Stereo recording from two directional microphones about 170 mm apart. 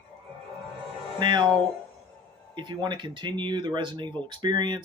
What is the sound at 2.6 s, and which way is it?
Speech, 25° right (ahead or behind).